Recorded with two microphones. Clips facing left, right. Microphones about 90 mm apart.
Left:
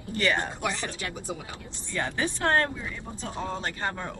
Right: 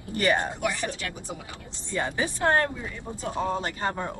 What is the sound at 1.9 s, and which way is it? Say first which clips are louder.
Speech: right 1 dB; 20° right (ahead or behind).